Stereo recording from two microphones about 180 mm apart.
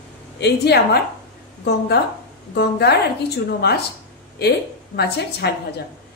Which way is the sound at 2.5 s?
65° left (ahead or behind).